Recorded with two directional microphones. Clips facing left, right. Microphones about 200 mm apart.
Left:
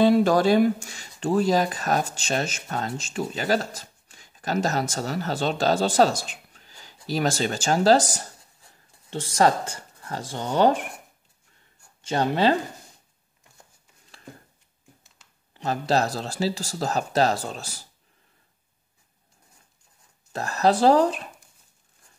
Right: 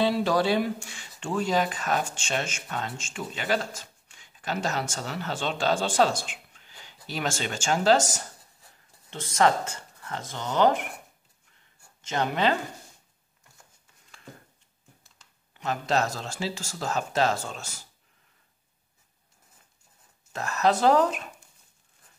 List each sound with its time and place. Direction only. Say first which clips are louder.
0.0 s speech: left 6 dB; 45° left (ahead or behind); by 10.9 s 30° left (ahead or behind)
12.0 s speech: left 4 dB; 30° left (ahead or behind)
15.5 s speech: left 3 dB; 35° left (ahead or behind)
20.3 s speech: left 3 dB; 35° left (ahead or behind)